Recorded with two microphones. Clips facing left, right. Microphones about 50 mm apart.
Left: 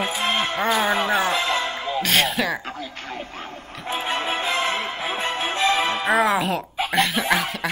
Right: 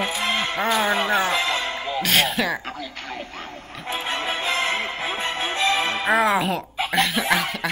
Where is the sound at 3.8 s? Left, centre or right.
Left.